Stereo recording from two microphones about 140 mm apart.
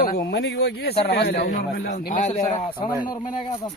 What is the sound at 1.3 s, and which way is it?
Speech, 90° left.